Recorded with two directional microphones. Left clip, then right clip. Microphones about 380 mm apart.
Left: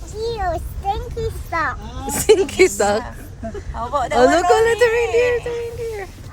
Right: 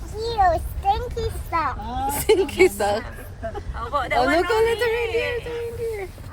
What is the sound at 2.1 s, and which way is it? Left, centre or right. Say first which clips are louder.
Speech: left 5 dB; left.